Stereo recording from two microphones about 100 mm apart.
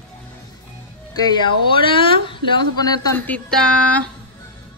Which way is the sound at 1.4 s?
60° left (ahead or behind).